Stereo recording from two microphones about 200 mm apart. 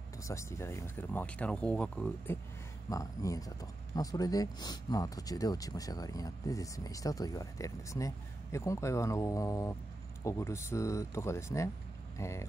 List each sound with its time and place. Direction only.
0.2 s speech: 15° left (ahead or behind)
2.9 s speech: 15° left (ahead or behind)